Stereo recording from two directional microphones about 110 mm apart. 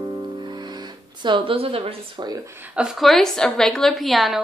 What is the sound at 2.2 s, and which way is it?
Speech, 40° right (ahead or behind).